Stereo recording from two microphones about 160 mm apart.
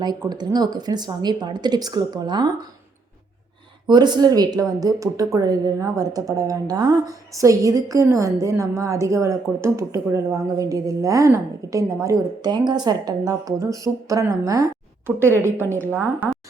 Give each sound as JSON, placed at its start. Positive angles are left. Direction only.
{"t": 0.0, "sound": "speech", "side_deg": -25}
{"t": 3.8, "sound": "speech", "side_deg": -25}